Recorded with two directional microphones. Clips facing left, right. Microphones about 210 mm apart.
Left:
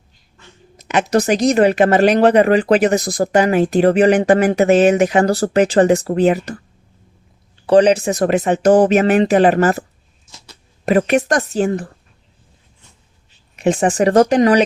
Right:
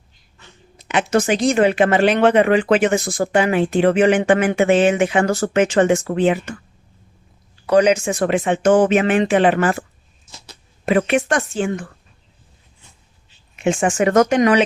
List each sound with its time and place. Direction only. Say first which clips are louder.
0.8 s speech: left 2 dB; 40° left (ahead or behind)
7.7 s speech: left 3 dB; 35° left (ahead or behind)
10.8 s speech: left 2 dB; 40° left (ahead or behind)
13.6 s speech: left 3 dB; 35° left (ahead or behind)